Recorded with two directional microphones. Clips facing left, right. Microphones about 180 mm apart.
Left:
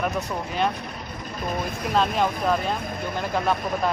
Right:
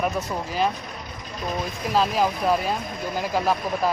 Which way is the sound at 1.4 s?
55° left (ahead or behind).